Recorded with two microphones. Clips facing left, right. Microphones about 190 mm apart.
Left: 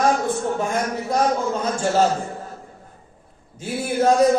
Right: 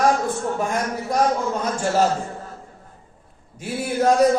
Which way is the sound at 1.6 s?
25° left (ahead or behind).